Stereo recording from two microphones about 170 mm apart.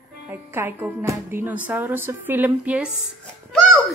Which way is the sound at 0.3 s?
10° right (ahead or behind).